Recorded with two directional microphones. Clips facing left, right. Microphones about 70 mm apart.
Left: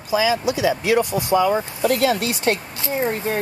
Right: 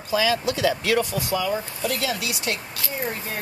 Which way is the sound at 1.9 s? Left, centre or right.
Left.